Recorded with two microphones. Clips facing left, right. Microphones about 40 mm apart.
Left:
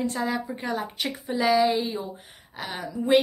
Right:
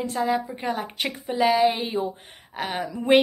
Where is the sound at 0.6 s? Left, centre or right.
Right.